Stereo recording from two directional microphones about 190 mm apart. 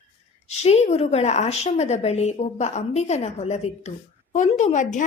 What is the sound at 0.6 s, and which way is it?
A woman's voice, 35° left (ahead or behind).